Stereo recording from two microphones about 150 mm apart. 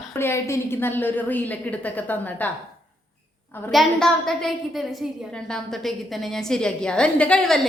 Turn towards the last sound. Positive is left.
turn(degrees=5)  # may be behind; listen again after turning